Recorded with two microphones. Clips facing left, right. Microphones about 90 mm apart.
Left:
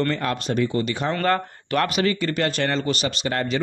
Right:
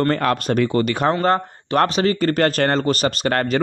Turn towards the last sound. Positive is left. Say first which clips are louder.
# right 5 dB
turn(degrees=-55)  # may be behind; listen again after turning